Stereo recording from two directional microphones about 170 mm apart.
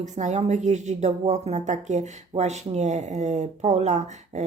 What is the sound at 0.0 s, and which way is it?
A woman's voice, 45° right (ahead or behind).